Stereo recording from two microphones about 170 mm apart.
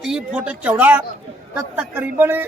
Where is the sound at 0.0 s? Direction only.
5° right (ahead or behind).